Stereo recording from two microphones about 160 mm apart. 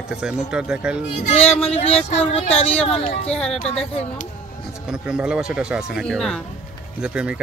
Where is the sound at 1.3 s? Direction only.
40° left (ahead or behind).